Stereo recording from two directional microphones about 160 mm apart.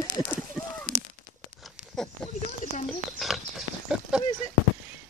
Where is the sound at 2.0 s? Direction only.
5° left (ahead or behind).